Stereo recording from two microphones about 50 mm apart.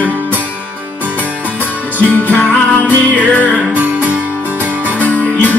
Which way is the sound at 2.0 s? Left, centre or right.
Left.